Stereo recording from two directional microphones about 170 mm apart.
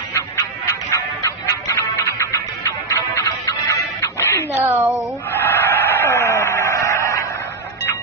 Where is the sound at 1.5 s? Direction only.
20° left (ahead or behind).